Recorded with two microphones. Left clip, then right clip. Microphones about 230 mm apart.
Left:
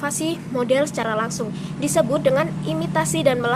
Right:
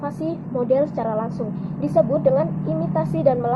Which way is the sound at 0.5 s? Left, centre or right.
Left.